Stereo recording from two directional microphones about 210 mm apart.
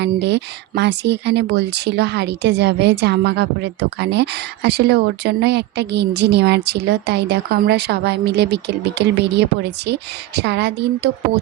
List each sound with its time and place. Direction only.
0.0 s speech: 55° right (ahead or behind)